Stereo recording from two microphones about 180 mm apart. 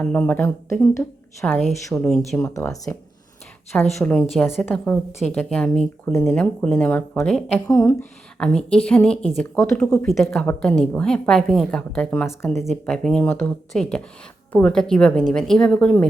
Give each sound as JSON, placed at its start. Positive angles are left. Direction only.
{"t": 0.0, "sound": "a woman's voice", "side_deg": 10}
{"t": 1.5, "sound": "a woman's voice", "side_deg": 5}
{"t": 2.4, "sound": "a woman's voice", "side_deg": 15}
{"t": 3.9, "sound": "a woman's voice", "side_deg": 0}
{"t": 4.6, "sound": "a woman's voice", "side_deg": 10}
{"t": 7.7, "sound": "a woman's voice", "side_deg": 15}
{"t": 8.4, "sound": "a woman's voice", "side_deg": 5}